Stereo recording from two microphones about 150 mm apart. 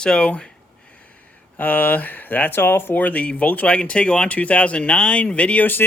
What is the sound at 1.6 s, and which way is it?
Speech, 10° left (ahead or behind).